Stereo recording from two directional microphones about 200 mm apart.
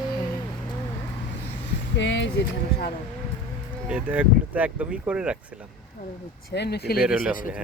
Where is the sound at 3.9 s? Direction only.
5° right (ahead or behind).